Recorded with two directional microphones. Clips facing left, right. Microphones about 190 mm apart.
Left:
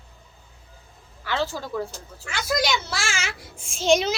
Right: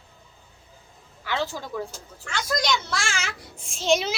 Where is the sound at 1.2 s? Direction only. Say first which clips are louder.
Left 2 dB; 15° right (ahead or behind).